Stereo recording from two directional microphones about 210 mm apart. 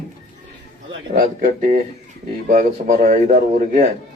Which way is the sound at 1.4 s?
40° right (ahead or behind).